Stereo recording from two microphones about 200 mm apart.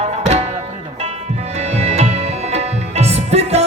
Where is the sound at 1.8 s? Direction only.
30° right (ahead or behind).